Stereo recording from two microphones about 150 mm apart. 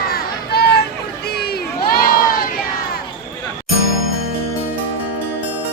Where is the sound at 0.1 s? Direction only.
90° left.